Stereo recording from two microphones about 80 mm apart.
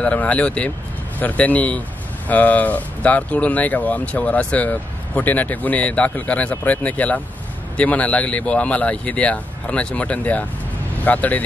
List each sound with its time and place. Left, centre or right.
0.0 s a man's voice: centre